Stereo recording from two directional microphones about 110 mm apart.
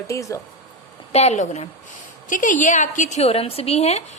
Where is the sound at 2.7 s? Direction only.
90° left.